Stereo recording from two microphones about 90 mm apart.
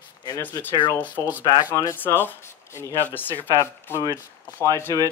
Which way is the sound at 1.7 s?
35° left (ahead or behind).